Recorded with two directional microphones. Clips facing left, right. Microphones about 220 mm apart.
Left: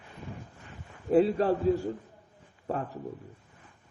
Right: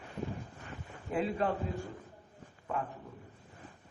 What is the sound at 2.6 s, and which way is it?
Speech, 35° left (ahead or behind).